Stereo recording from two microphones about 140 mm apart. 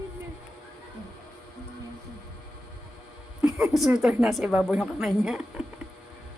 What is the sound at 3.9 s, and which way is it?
A woman's voice, 5° right (ahead or behind).